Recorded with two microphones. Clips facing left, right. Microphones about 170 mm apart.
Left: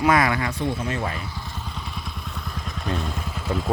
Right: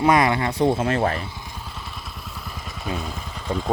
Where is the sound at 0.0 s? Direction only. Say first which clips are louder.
Right 2 dB; 25° right (ahead or behind).